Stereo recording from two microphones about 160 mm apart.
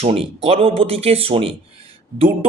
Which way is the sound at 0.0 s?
40° right (ahead or behind).